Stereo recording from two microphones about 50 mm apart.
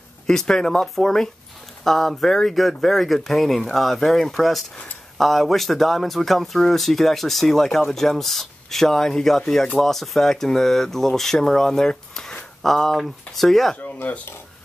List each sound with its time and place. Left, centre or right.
0.3 s speech: centre
12.6 s speech: centre
14.0 s speech: left